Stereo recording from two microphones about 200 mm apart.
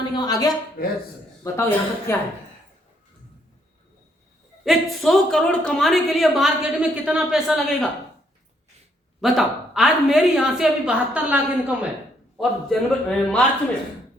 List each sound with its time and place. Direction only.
0.1 s speech: 20° left (ahead or behind)
0.8 s speech: 50° left (ahead or behind)
1.5 s speech: 15° left (ahead or behind)
4.6 s speech: centre (ahead or behind)
9.2 s speech: centre (ahead or behind)